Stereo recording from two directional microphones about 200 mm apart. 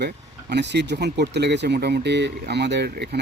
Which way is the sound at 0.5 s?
60° right (ahead or behind).